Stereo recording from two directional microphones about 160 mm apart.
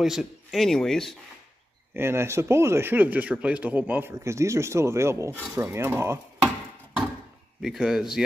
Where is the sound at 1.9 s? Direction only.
15° right (ahead or behind).